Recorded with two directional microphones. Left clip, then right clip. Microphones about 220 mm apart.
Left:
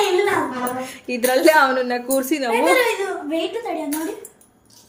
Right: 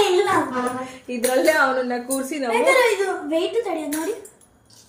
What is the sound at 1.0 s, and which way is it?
Speech, 55° left (ahead or behind).